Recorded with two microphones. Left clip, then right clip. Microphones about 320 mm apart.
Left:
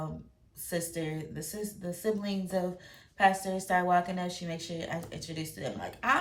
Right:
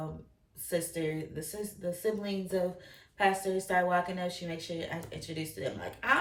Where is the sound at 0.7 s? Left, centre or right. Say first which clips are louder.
Right 2 dB; centre.